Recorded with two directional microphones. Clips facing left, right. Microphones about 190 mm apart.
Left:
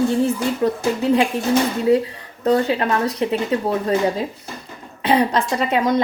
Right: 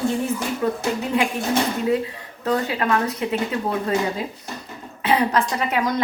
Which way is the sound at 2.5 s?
35° left (ahead or behind).